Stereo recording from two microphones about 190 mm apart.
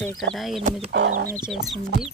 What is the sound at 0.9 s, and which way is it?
Speech, 65° right (ahead or behind).